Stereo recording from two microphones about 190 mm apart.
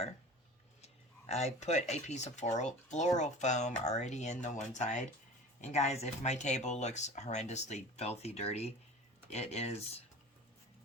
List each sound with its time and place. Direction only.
1.3 s speech: 35° left (ahead or behind)